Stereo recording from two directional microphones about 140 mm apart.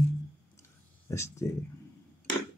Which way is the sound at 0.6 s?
20° left (ahead or behind).